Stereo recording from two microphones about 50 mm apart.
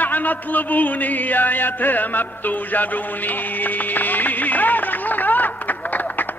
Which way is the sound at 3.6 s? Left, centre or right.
Left.